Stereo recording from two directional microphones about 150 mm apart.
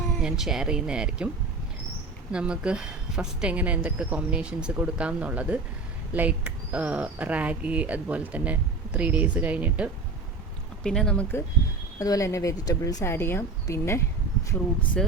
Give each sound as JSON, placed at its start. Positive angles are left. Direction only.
{"t": 0.2, "sound": "speech", "side_deg": -5}
{"t": 2.3, "sound": "speech", "side_deg": -5}
{"t": 10.8, "sound": "speech", "side_deg": 5}
{"t": 11.9, "sound": "speech", "side_deg": 25}
{"t": 15.0, "sound": "speech", "side_deg": 5}